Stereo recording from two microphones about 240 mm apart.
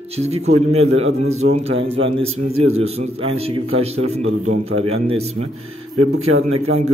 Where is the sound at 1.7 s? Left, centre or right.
Right.